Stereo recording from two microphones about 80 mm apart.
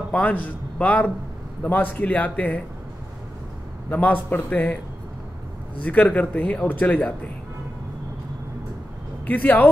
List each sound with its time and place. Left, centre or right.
0.1 s a man's voice: centre
3.9 s a man's voice: left
5.8 s a man's voice: centre
9.2 s speech: left